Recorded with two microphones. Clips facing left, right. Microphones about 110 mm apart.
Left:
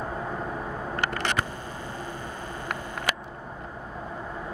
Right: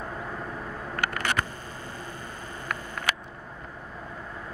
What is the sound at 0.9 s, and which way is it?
Vehicle, 20° left (ahead or behind).